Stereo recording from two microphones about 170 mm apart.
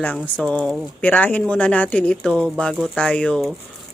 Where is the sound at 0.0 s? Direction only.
5° left (ahead or behind).